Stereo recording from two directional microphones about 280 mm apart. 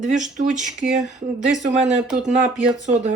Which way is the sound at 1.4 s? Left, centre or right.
Right.